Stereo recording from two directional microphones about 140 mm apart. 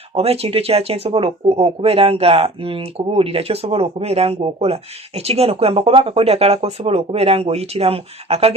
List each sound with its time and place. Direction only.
0.1 s speech: 45° right (ahead or behind)